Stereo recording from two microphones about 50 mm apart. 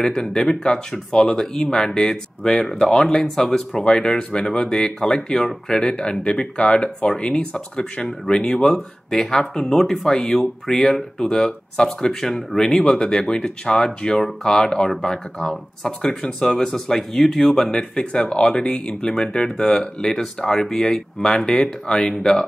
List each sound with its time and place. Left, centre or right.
0.0 s speech: centre